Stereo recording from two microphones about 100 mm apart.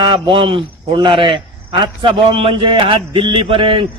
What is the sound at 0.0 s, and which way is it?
Speech, 55° right (ahead or behind).